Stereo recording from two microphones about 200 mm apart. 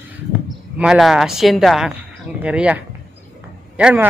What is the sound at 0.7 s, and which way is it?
Speech, 5° right (ahead or behind).